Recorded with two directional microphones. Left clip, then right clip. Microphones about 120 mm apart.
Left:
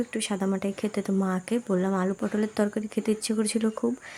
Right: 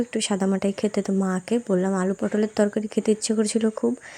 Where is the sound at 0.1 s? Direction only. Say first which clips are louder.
Right 5 dB; 30° right (ahead or behind).